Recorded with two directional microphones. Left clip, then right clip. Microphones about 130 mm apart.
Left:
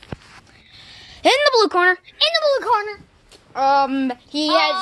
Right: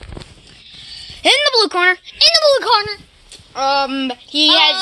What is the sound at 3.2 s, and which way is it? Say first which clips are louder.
Speech: even; 5° right (ahead or behind).